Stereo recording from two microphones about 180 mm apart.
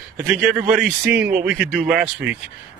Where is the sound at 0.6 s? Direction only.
10° right (ahead or behind).